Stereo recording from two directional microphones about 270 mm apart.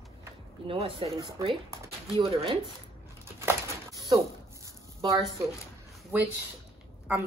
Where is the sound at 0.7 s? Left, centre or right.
Centre.